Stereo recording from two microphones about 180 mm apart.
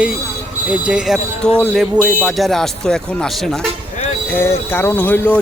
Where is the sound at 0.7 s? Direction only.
5° right (ahead or behind).